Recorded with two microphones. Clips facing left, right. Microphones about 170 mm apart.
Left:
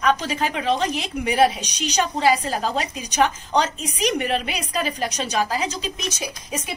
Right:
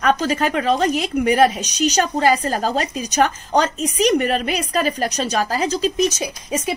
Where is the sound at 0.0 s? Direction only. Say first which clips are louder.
Right 3 dB; 45° right (ahead or behind).